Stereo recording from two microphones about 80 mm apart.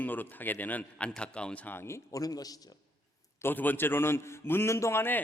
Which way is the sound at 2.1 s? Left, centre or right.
Left.